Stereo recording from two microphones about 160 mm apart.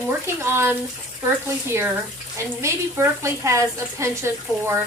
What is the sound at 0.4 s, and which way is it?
Speech, 15° right (ahead or behind).